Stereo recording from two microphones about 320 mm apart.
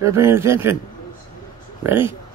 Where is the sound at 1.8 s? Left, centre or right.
Centre.